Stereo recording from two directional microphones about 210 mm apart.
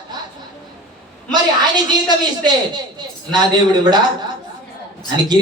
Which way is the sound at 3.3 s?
20° right (ahead or behind).